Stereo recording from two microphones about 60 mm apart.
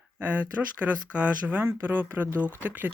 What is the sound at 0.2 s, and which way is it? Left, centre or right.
Speech, right.